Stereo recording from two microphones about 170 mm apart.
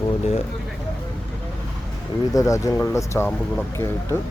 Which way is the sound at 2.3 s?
20° left (ahead or behind).